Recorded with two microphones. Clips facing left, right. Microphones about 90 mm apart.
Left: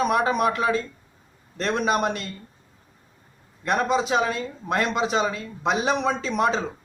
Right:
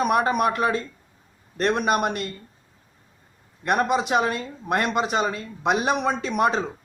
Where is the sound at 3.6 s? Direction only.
60° right (ahead or behind).